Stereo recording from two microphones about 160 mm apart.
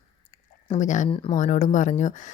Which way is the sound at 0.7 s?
50° left (ahead or behind).